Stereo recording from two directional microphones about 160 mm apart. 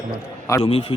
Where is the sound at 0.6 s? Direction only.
35° left (ahead or behind).